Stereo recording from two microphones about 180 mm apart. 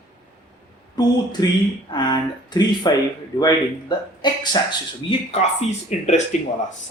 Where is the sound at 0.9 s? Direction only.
20° left (ahead or behind).